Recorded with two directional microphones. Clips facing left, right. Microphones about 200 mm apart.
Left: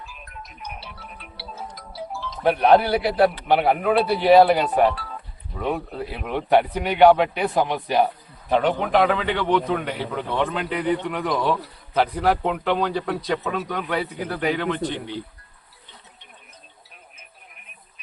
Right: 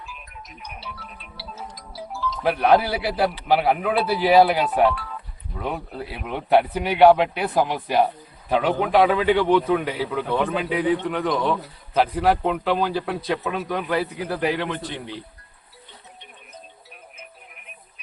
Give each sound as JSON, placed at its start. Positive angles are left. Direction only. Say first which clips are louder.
{"t": 0.8, "sound": "music", "louder": "right 1 dB", "side_deg": 60}
{"t": 2.7, "sound": "speech", "louder": "left 3 dB", "side_deg": -5}